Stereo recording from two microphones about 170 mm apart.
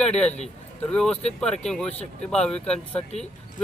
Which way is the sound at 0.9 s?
5° left (ahead or behind).